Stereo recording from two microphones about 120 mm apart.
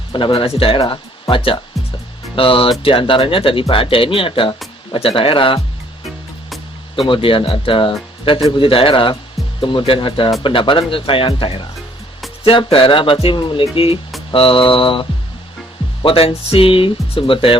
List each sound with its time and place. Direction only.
0.1 s speech: 45° left (ahead or behind)
7.1 s speech: 50° left (ahead or behind)
16.0 s speech: 50° left (ahead or behind)